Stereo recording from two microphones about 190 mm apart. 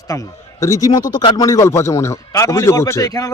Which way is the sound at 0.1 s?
15° left (ahead or behind).